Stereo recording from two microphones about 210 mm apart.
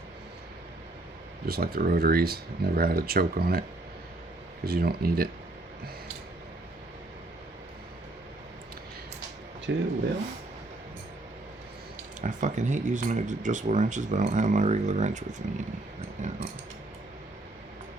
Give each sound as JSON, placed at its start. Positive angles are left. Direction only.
{"t": 1.5, "sound": "speech", "side_deg": -45}
{"t": 4.6, "sound": "speech", "side_deg": -45}
{"t": 9.7, "sound": "speech", "side_deg": -55}
{"t": 12.2, "sound": "speech", "side_deg": -35}